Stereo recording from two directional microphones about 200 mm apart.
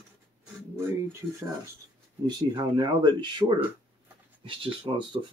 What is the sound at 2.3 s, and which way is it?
Speech, 20° right (ahead or behind).